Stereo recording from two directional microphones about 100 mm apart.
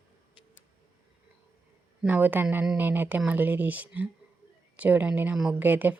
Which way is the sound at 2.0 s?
15° right (ahead or behind).